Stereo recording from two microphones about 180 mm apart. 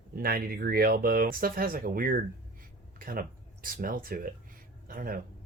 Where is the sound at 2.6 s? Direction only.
50° right (ahead or behind).